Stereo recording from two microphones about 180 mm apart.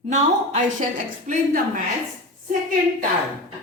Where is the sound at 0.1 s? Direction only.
40° right (ahead or behind).